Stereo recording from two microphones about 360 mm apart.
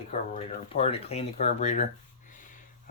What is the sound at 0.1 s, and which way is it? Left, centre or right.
Mantra, centre.